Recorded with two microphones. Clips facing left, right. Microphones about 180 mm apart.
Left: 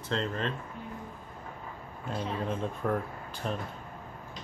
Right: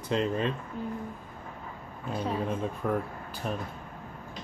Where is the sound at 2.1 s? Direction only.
5° right (ahead or behind).